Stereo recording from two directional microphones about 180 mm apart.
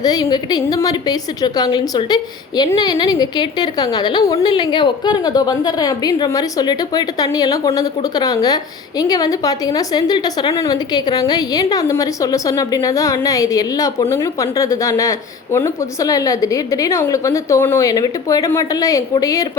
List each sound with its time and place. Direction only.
0.0 s a woman's voice: 20° left (ahead or behind)